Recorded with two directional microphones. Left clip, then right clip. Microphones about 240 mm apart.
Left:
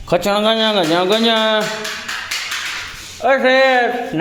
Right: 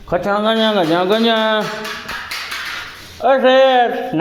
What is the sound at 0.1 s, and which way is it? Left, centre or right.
Speech, left.